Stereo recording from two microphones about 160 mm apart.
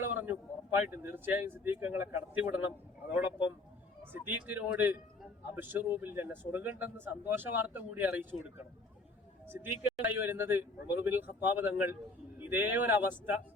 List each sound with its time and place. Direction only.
0.0 s a sound: 10° right (ahead or behind)
0.8 s a man's voice: 10° right (ahead or behind)
4.3 s a man's voice: 10° right (ahead or behind)